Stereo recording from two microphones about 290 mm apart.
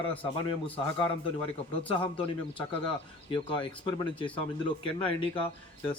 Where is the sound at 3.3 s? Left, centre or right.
Centre.